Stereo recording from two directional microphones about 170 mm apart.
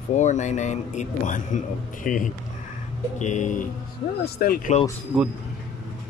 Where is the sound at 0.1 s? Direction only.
45° left (ahead or behind).